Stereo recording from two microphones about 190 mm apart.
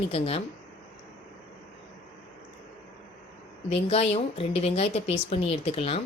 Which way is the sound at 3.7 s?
30° left (ahead or behind).